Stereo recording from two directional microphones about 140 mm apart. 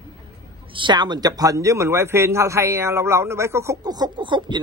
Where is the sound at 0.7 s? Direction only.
30° right (ahead or behind).